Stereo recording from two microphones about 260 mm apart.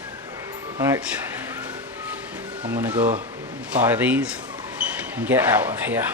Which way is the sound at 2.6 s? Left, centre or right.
Centre.